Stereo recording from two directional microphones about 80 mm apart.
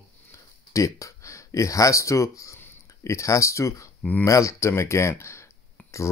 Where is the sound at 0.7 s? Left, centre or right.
Left.